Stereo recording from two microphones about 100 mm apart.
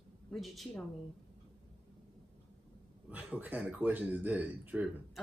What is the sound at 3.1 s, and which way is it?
Speech, 15° right (ahead or behind).